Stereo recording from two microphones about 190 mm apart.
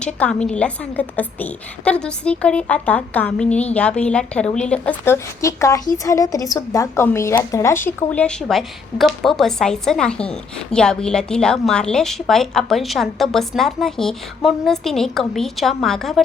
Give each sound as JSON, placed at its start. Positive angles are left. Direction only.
{"t": 0.0, "sound": "a woman's voice", "side_deg": 5}